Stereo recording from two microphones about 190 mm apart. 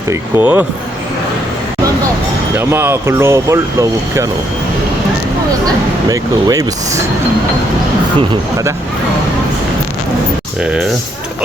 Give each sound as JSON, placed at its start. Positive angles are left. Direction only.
{"t": 0.1, "sound": "speech", "side_deg": -10}
{"t": 2.6, "sound": "speech", "side_deg": -10}
{"t": 6.1, "sound": "speech", "side_deg": -20}